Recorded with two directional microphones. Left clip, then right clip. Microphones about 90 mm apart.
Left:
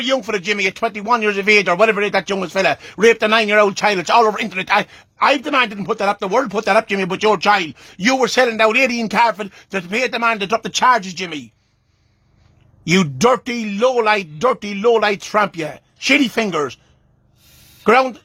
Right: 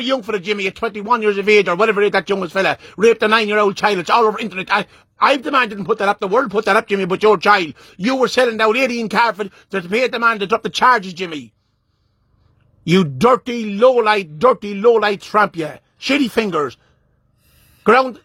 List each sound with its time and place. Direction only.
0.2 s speech: 20° right (ahead or behind)
2.0 s a man's voice: 45° right (ahead or behind)
2.8 s a man's voice: 20° right (ahead or behind)
3.2 s speech: 55° right (ahead or behind)
3.4 s a man's voice: 30° right (ahead or behind)
5.4 s a man's voice: 50° right (ahead or behind)
7.1 s speech: 55° right (ahead or behind)
8.1 s a man's voice: 30° right (ahead or behind)
9.5 s speech: 25° right (ahead or behind)
9.8 s a man's voice: 45° right (ahead or behind)
12.8 s a man's voice: 40° right (ahead or behind)
13.7 s speech: 60° right (ahead or behind)
14.0 s speech: 40° right (ahead or behind)
14.6 s a man's voice: 30° right (ahead or behind)